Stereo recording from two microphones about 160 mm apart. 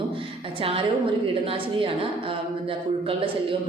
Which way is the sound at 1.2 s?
35° right (ahead or behind).